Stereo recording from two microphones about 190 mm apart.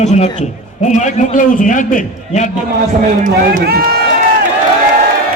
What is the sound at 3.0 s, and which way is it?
Speech, 45° right (ahead or behind).